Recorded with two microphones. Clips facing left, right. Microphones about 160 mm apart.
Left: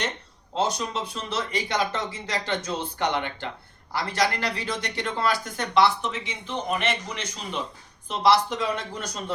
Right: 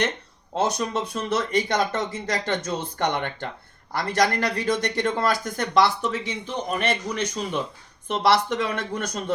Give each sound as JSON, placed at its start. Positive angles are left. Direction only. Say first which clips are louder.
{"t": 0.5, "sound": "speech", "louder": "right 2 dB", "side_deg": -50}
{"t": 8.0, "sound": "speech", "louder": "even", "side_deg": -60}